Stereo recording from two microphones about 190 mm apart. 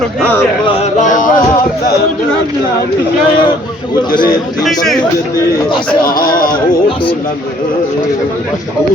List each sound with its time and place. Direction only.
0.2 s speech: 10° left (ahead or behind)
0.7 s speech: 35° left (ahead or behind)
4.6 s speech: centre (ahead or behind)
6.1 s speech: 50° left (ahead or behind)